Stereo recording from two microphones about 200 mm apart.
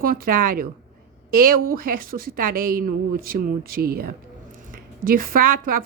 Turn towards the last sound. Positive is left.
turn(degrees=-45)  # may be behind; listen again after turning